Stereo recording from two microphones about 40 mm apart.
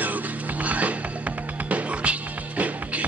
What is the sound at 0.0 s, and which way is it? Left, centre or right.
Music, right.